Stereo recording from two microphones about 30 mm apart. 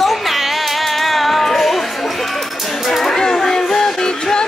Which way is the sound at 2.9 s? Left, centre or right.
Centre.